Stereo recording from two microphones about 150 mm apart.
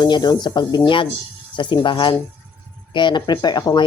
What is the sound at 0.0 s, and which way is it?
Speech, 30° left (ahead or behind).